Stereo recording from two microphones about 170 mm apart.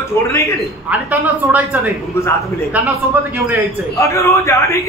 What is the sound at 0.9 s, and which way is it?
Speech, 10° right (ahead or behind).